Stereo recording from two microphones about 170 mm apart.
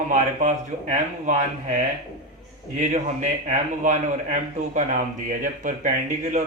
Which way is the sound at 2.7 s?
45° right (ahead or behind).